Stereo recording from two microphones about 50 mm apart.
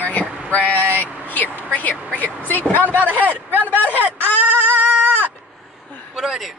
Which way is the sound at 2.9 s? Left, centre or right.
Right.